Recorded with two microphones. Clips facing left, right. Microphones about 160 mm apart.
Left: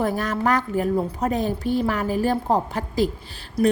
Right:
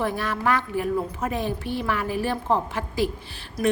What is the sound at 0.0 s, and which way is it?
A woman's voice, 40° left (ahead or behind).